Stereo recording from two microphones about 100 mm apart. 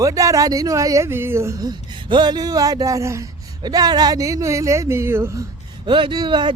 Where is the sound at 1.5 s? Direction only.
45° right (ahead or behind).